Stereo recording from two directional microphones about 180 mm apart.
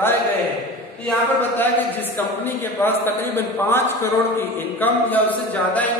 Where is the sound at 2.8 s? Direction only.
10° left (ahead or behind).